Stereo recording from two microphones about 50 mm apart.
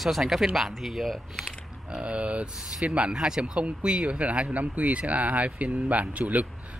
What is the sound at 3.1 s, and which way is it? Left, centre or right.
Speech, centre.